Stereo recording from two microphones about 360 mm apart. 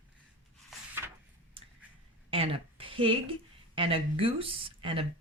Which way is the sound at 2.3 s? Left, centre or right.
Centre.